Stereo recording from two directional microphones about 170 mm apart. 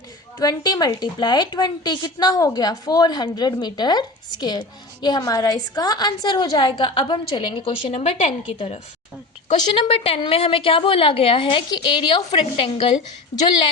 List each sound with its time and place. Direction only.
0.3 s a woman's voice: 20° left (ahead or behind)